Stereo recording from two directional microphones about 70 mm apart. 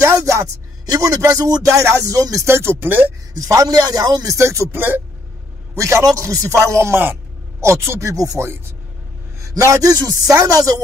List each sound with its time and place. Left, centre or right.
0.0 s a sound: right
0.9 s music: right
2.4 s speech: right
3.3 s a man's voice: right
4.4 s music: right
4.7 s speech: right
5.8 s music: right
9.4 s a man's voice: right
10.3 s music: right